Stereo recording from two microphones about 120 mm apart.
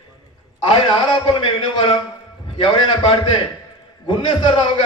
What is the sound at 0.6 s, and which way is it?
A man's voice, 40° left (ahead or behind).